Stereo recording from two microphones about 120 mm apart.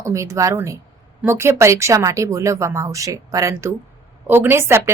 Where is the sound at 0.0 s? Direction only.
25° right (ahead or behind).